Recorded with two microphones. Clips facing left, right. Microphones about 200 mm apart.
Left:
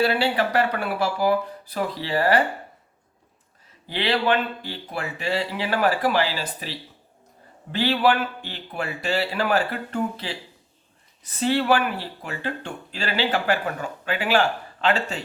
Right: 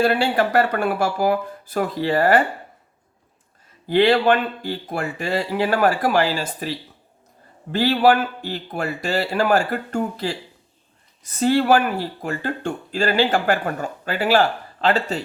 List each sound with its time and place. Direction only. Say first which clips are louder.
0.0 s speech: right 3 dB; 50° right (ahead or behind)
3.8 s speech: right 7 dB; 50° right (ahead or behind)